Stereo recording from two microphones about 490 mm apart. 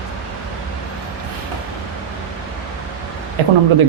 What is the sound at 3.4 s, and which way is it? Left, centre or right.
Speech, right.